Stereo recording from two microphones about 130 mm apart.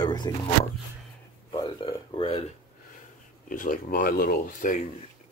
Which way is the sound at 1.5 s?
35° left (ahead or behind).